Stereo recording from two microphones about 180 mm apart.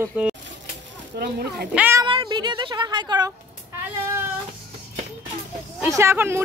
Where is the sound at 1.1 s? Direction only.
60° right (ahead or behind).